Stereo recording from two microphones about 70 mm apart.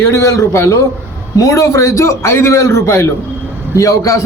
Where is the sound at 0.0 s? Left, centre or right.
Left.